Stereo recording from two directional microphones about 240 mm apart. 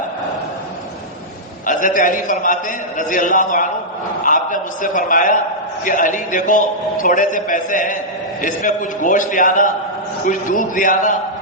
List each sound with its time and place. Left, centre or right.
1.6 s a man's voice: left